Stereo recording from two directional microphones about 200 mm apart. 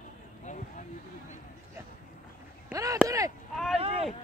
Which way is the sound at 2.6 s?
15° right (ahead or behind).